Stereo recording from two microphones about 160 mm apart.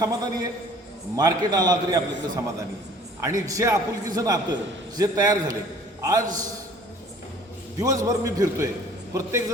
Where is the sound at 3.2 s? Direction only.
20° right (ahead or behind).